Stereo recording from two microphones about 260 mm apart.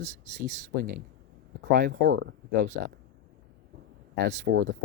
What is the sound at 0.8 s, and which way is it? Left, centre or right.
Speech, right.